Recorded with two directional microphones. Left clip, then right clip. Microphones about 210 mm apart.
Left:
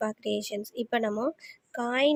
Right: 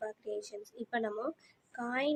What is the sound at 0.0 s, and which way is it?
A woman's voice, 40° left (ahead or behind).